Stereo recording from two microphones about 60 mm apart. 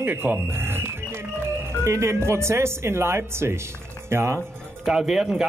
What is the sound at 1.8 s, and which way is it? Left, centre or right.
Speech, right.